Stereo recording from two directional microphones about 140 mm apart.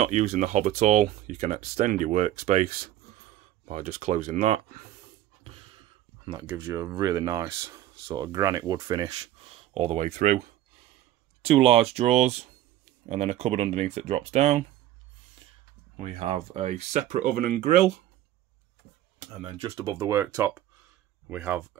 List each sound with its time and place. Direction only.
0.2 s speech: 75° right (ahead or behind); by 1.9 s 50° right (ahead or behind)
1.9 s speech: 65° right (ahead or behind)
3.6 s speech: 60° right (ahead or behind)
6.3 s speech: 20° right (ahead or behind)
9.4 s speech: 50° right (ahead or behind)
11.4 s speech: 45° right (ahead or behind)
16.0 s speech: 45° right (ahead or behind); by 17.9 s 65° right (ahead or behind)
19.4 s speech: 40° right (ahead or behind)
20.1 s speech: 15° right (ahead or behind)